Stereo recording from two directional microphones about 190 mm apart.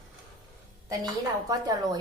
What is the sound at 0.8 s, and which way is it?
A woman's voice, 20° right (ahead or behind).